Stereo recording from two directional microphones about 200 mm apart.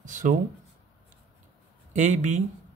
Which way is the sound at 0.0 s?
40° right (ahead or behind).